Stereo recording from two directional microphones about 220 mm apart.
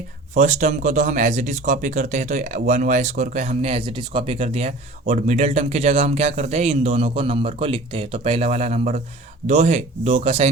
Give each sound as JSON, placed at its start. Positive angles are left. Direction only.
{"t": 0.3, "sound": "speech", "side_deg": -30}